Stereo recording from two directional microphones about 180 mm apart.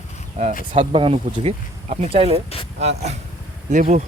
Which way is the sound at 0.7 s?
30° right (ahead or behind).